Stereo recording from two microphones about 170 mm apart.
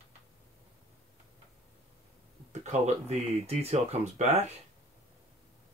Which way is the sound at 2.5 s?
40° right (ahead or behind).